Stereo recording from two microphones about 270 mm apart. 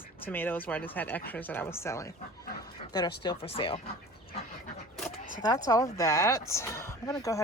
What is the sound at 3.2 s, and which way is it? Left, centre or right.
Speech, centre.